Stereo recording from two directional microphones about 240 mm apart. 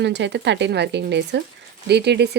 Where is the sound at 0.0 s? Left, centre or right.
Right.